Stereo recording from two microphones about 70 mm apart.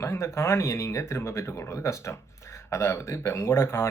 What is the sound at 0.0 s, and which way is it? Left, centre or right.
Speech, left.